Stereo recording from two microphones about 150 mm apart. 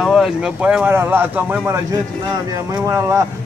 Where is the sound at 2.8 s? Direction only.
20° right (ahead or behind).